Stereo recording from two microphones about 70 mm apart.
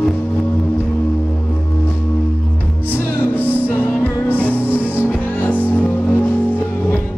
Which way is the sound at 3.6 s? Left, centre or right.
Left.